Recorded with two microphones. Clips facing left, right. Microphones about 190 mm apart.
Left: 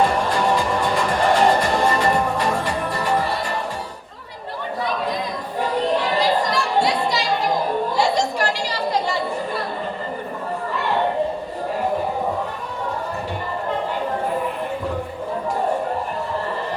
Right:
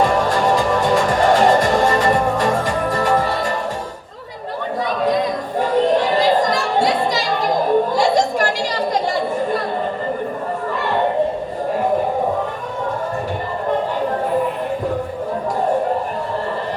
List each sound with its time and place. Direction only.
0.0 s music: 45° right (ahead or behind)
5.5 s a sound: 45° right (ahead or behind)
8.9 s chatter: 45° right (ahead or behind)